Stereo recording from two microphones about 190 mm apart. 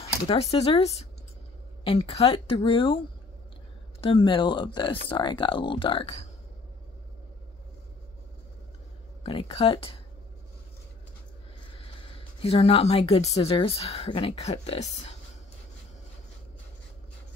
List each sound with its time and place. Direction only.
0.0 s speech: 30° left (ahead or behind)
1.9 s speech: 30° left (ahead or behind)
9.2 s speech: 30° left (ahead or behind)
11.7 s a woman's voice: 30° left (ahead or behind)